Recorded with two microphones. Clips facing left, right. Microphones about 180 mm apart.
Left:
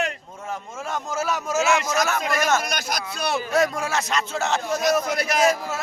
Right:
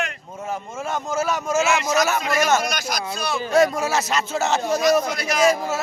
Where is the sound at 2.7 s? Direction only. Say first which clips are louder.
Right 2 dB; 60° left (ahead or behind).